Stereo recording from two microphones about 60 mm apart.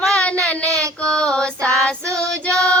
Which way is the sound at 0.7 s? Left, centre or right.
Right.